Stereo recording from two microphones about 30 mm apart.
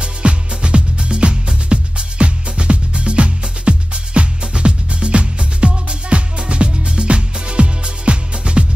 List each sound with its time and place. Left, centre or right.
0.0 s music: right